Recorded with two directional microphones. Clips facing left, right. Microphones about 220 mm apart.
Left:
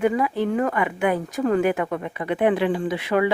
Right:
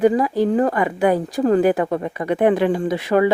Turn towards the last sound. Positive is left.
turn(degrees=-40)  # may be behind; listen again after turning